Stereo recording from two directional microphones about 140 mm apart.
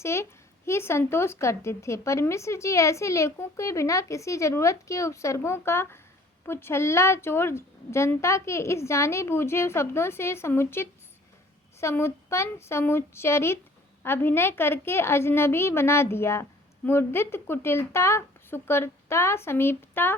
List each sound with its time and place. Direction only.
0.0 s a woman's voice: 20° left (ahead or behind)